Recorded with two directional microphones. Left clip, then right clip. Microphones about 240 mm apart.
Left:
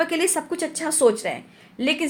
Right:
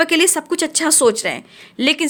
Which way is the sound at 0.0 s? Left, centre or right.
Right.